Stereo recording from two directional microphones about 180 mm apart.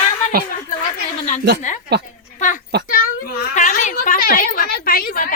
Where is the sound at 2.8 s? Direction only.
50° left (ahead or behind).